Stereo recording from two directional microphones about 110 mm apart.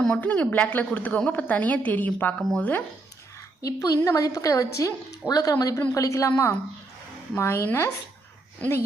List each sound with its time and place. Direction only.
0.0 s a woman's voice: 10° left (ahead or behind)
3.6 s a woman's voice: 30° left (ahead or behind)